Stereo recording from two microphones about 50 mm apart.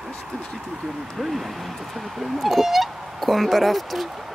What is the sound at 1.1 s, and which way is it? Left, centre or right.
Speech, centre.